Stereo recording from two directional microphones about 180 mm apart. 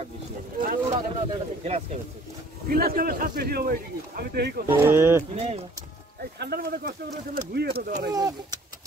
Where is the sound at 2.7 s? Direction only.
55° right (ahead or behind).